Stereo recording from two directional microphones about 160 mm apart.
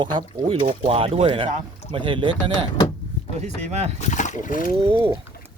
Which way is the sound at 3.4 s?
45° right (ahead or behind).